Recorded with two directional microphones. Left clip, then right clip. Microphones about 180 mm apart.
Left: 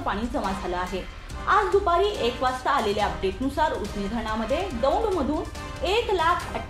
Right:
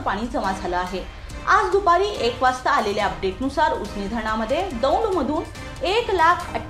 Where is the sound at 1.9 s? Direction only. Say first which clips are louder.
Right 4 dB; 15° right (ahead or behind).